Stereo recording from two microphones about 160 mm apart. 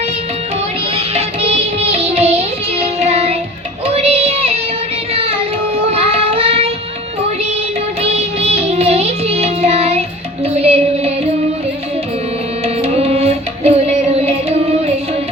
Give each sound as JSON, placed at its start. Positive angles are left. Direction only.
{"t": 0.9, "sound": "music", "side_deg": -40}
{"t": 3.8, "sound": "child singing", "side_deg": -40}
{"t": 8.0, "sound": "music", "side_deg": -40}
{"t": 12.6, "sound": "music", "side_deg": -40}